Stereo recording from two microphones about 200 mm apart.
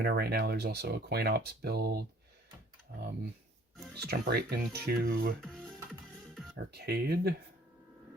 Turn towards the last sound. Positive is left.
turn(degrees=-50)  # may be behind; listen again after turning